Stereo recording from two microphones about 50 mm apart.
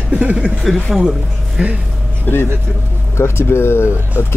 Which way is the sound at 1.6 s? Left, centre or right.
Centre.